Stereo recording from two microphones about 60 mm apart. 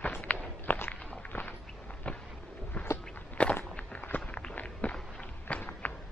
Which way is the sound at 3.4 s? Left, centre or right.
Left.